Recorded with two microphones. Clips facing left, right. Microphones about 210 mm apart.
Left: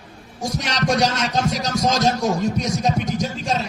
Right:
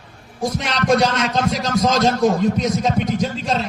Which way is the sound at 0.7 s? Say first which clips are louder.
Right 3 dB; 50° right (ahead or behind).